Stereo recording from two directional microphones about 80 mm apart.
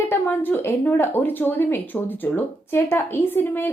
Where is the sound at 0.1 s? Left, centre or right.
Left.